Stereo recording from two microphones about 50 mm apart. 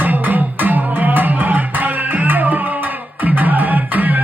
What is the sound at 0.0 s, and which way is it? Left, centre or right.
Music, right.